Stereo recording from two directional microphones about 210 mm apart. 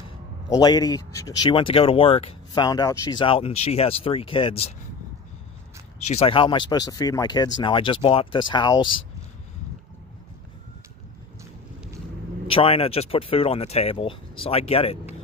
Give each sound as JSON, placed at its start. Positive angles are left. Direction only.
{"t": 0.5, "sound": "speech", "side_deg": 20}
{"t": 5.9, "sound": "speech", "side_deg": 30}
{"t": 12.4, "sound": "speech", "side_deg": 25}